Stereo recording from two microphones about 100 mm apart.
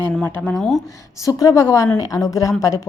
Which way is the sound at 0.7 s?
35° left (ahead or behind).